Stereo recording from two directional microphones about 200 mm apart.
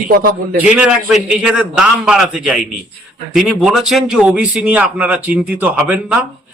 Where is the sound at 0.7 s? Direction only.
5° right (ahead or behind).